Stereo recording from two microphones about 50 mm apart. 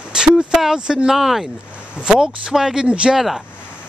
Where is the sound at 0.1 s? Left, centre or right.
Centre.